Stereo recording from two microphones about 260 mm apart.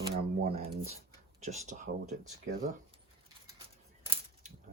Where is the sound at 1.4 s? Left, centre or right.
Right.